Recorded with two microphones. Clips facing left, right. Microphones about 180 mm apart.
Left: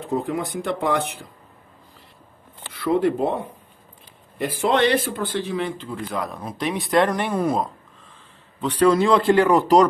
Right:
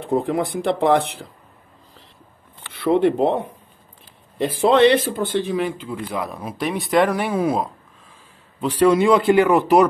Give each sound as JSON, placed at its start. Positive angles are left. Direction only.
{"t": 0.1, "sound": "speech", "side_deg": -30}
{"t": 2.7, "sound": "speech", "side_deg": -25}
{"t": 5.8, "sound": "speech", "side_deg": -5}